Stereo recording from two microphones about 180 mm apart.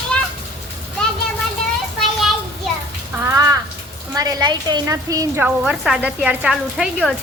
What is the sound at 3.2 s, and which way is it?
A woman's voice, 20° right (ahead or behind).